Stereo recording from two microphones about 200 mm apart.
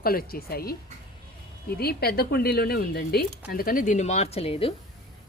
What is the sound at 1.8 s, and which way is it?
Speech, 50° left (ahead or behind).